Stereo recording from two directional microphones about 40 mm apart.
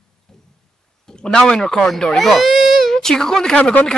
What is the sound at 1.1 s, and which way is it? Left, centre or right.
Speech, centre.